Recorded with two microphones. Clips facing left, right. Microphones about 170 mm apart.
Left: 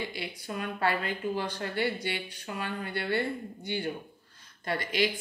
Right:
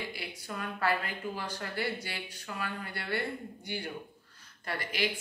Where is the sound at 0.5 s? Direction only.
25° left (ahead or behind).